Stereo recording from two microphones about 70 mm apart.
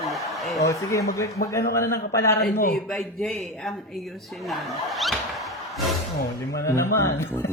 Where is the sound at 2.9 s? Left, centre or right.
Centre.